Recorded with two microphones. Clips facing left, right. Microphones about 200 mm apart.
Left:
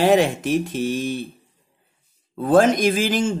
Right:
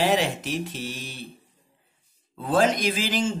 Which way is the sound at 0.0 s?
50° left (ahead or behind).